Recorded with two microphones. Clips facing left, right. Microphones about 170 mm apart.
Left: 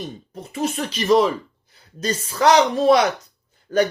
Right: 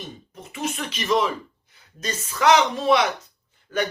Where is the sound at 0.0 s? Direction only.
35° left (ahead or behind).